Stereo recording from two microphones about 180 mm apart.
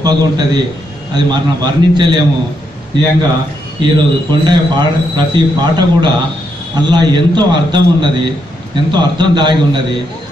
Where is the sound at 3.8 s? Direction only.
25° right (ahead or behind).